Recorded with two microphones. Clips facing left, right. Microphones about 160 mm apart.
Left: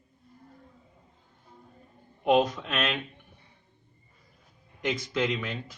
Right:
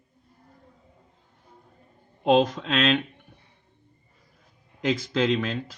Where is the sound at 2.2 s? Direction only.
75° right (ahead or behind).